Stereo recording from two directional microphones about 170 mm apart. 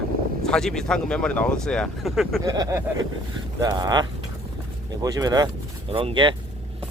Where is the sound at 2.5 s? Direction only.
20° right (ahead or behind).